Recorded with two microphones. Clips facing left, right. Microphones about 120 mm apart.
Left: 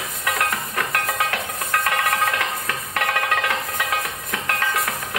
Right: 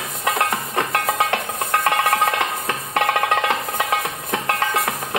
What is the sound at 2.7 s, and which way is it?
Music, 30° right (ahead or behind).